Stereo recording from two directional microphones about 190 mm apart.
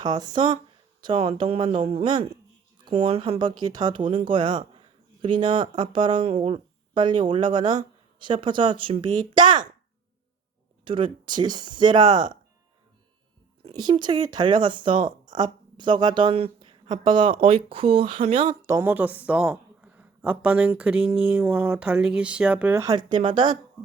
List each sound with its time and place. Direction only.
0.0 s speech: 20° right (ahead or behind)
10.8 s speech: 25° right (ahead or behind)
13.6 s speech: 25° right (ahead or behind)
18.6 s a woman's voice: 15° right (ahead or behind)